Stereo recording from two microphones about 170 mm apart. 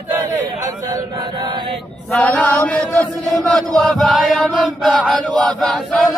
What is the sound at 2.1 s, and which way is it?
Chant, 10° left (ahead or behind).